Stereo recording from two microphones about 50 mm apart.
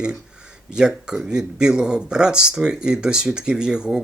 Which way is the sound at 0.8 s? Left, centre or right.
Centre.